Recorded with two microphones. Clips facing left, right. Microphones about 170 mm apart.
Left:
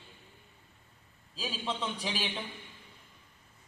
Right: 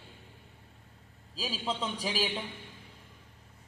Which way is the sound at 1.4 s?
10° right (ahead or behind).